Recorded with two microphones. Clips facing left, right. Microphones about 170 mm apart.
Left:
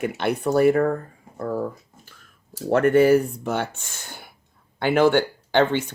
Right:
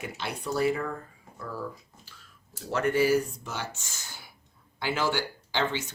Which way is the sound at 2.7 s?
55° left (ahead or behind).